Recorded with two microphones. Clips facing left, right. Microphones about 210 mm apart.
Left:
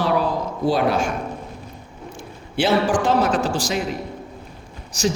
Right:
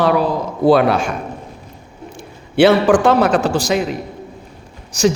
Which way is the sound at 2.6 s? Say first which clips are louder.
Right 8 dB; 65° right (ahead or behind).